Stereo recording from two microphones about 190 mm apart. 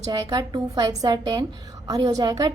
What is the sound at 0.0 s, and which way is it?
A woman's voice, 20° right (ahead or behind).